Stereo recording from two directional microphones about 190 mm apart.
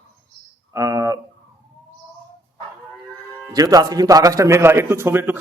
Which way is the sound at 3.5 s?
20° right (ahead or behind).